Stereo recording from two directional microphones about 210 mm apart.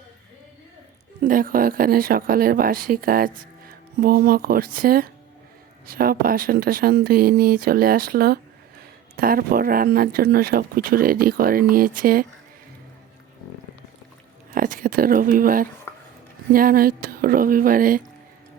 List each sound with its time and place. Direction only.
1.2 s speech: 40° right (ahead or behind)
14.5 s a sound: 40° right (ahead or behind)
16.5 s speech: 45° right (ahead or behind)